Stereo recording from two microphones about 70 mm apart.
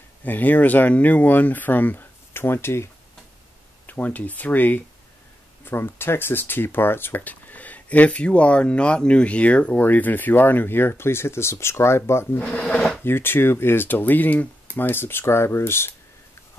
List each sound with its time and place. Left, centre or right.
0.2 s speech: left
3.8 s speech: left
12.4 s speech: centre
13.0 s speech: left